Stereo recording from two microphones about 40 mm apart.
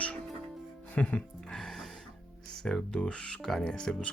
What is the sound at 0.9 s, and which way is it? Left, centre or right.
Speech, left.